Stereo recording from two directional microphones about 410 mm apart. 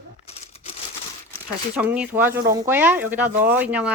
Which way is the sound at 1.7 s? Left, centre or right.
Centre.